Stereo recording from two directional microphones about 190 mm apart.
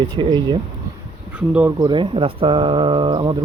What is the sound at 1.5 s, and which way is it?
Speech, 5° right (ahead or behind).